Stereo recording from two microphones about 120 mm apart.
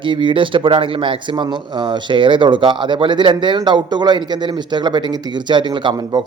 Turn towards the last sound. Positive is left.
turn(degrees=-40)  # may be behind; listen again after turning